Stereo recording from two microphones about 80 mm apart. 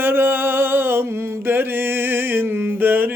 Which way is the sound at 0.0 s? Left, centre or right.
Right.